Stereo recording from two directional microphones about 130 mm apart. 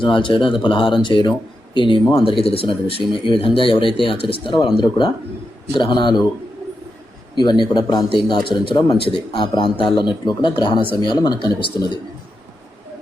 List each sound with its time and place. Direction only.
0.0 s a man's voice: 40° left (ahead or behind)
7.3 s a man's voice: 35° left (ahead or behind)